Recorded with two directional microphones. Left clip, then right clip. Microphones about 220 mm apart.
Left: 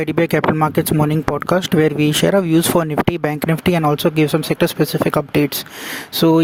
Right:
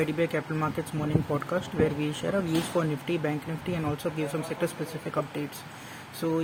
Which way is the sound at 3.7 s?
45° left (ahead or behind).